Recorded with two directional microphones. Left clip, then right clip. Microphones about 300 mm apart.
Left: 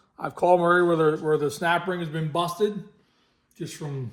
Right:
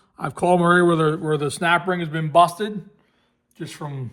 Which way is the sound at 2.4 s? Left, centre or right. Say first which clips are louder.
Right 5 dB; centre.